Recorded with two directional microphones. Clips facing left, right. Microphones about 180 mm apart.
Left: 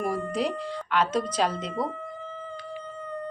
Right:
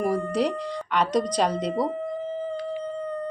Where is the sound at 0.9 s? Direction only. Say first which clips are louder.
Even; centre (ahead or behind).